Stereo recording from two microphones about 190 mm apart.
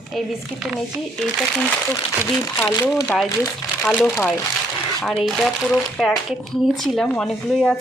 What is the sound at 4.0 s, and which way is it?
Speech, 5° left (ahead or behind).